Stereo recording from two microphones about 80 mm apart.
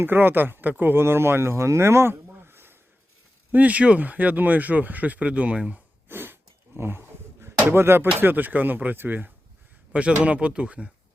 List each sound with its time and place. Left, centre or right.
0.0 s speech: right
3.5 s speech: centre
6.1 s a sound: right
7.6 s speech: right